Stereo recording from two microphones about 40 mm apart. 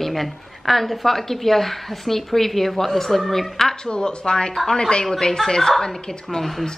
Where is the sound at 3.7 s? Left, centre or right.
Left.